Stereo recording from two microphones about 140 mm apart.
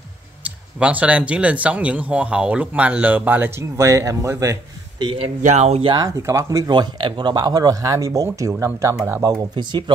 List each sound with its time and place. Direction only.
0.4 s speech: 10° right (ahead or behind)
5.4 s speech: 55° right (ahead or behind)
5.9 s speech: 25° right (ahead or behind)